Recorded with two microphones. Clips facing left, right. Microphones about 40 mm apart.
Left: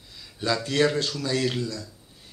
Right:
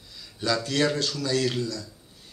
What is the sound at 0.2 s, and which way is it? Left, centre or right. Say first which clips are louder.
Speech: even; centre.